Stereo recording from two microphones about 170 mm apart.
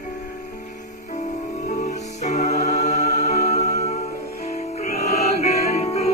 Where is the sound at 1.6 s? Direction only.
45° left (ahead or behind).